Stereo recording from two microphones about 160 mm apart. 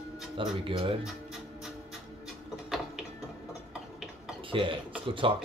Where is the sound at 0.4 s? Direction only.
35° right (ahead or behind).